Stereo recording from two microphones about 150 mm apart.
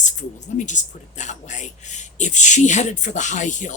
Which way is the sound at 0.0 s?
55° left (ahead or behind).